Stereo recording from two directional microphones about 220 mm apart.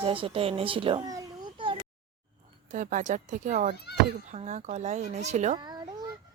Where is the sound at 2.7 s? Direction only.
35° right (ahead or behind).